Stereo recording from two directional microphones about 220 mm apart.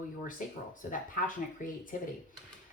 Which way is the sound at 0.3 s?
35° left (ahead or behind).